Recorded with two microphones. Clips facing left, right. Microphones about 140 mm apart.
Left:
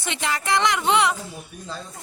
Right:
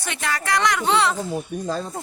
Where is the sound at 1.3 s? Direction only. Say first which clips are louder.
Right 10 dB; 50° right (ahead or behind).